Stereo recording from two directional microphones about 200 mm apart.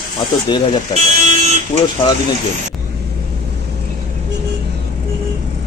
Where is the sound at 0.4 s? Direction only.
20° left (ahead or behind).